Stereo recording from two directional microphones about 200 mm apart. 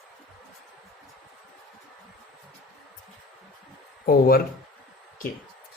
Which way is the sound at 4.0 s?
50° left (ahead or behind).